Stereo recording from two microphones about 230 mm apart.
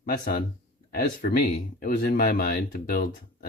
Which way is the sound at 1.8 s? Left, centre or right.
Left.